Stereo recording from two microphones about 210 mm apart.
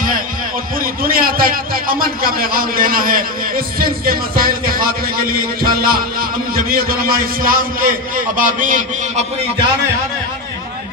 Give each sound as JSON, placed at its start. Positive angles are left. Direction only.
{"t": 1.0, "sound": "a man's voice", "side_deg": -45}